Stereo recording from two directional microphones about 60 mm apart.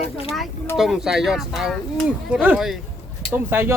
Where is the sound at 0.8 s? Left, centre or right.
Centre.